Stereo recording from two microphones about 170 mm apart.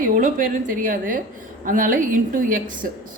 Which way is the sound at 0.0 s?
55° right (ahead or behind).